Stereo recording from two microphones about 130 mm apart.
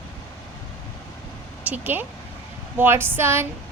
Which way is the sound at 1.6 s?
15° right (ahead or behind).